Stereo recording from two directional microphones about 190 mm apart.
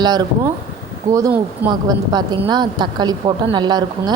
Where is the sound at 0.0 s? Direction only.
20° right (ahead or behind).